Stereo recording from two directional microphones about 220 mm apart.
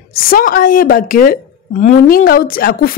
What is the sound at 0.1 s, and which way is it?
A woman's voice, 40° left (ahead or behind).